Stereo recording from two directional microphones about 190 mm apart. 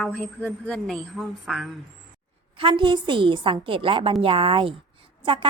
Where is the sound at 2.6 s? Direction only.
25° right (ahead or behind).